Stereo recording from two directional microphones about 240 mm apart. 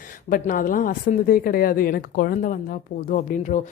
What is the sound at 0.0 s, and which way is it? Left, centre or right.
A woman's voice, left.